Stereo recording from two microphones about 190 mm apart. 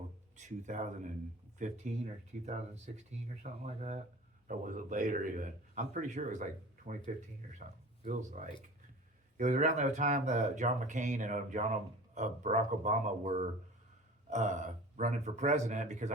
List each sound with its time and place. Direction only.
0.3 s speech: 40° right (ahead or behind)